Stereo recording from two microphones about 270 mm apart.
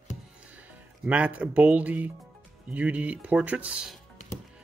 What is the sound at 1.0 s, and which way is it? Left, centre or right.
Speech, centre.